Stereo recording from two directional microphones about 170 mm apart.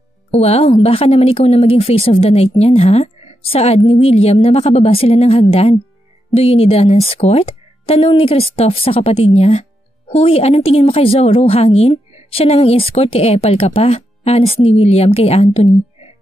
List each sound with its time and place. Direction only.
0.3 s speech: 40° left (ahead or behind)